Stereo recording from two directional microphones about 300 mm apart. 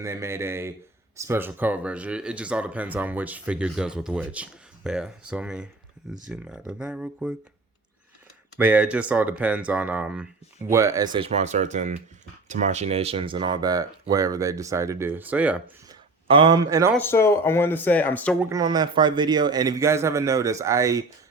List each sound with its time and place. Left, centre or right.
0.0 s speech: centre
8.5 s speech: centre
16.3 s speech: centre
16.9 s speech: centre
18.4 s speech: centre